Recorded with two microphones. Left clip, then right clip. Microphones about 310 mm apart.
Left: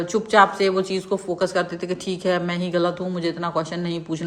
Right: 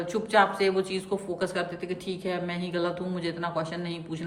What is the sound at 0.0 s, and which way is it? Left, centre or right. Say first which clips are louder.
A woman's voice: left 7 dB; centre.